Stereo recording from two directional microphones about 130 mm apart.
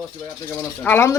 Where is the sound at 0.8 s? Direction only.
15° left (ahead or behind).